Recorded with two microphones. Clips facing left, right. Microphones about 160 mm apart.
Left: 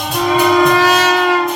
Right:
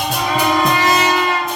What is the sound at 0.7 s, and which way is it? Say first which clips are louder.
Music: left 3 dB; 90° left.